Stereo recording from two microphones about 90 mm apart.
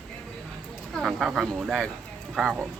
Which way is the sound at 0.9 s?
Centre (ahead or behind).